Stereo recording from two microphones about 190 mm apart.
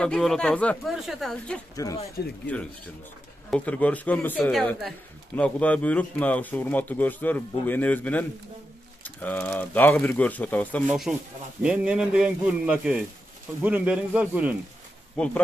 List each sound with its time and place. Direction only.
0.0 s speech: 5° left (ahead or behind)
2.2 s speech: 55° left (ahead or behind)
3.4 s speech: 5° left (ahead or behind)
10.9 s speech: 5° right (ahead or behind)